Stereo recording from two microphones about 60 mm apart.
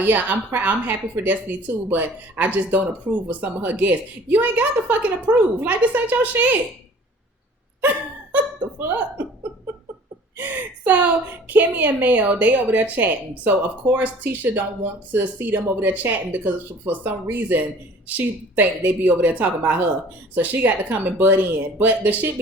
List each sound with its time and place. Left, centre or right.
0.0 s a woman's voice: right
8.8 s speech: right
10.3 s a woman's voice: right